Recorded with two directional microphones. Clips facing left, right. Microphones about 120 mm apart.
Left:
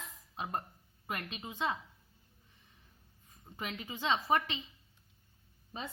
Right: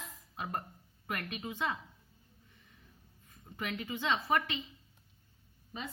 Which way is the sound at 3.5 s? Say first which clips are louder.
Right 3 dB; 25° left (ahead or behind).